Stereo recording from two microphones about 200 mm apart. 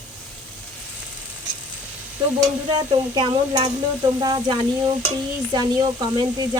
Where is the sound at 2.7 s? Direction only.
20° right (ahead or behind).